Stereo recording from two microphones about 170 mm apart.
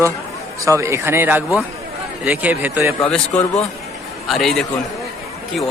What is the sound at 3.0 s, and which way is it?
A man's voice, 5° left (ahead or behind).